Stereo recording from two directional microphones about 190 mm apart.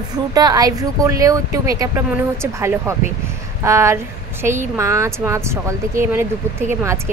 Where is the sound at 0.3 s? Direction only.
20° right (ahead or behind).